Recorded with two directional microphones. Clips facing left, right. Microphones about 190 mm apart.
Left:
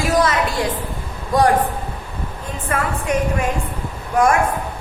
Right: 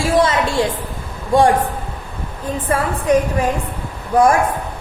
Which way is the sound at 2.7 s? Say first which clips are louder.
Right 5 dB; 30° right (ahead or behind).